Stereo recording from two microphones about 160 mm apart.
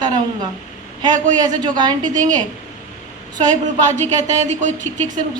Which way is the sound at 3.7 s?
50° right (ahead or behind).